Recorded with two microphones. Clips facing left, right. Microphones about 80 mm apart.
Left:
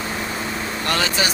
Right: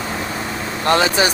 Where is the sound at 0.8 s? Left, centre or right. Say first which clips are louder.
Right 7 dB; right.